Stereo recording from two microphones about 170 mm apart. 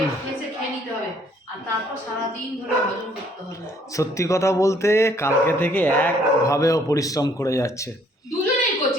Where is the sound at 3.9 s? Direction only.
15° left (ahead or behind).